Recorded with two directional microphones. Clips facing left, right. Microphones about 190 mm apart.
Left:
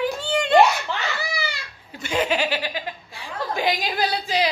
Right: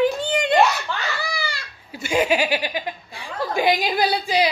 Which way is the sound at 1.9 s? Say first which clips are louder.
Right 3 dB; 10° right (ahead or behind).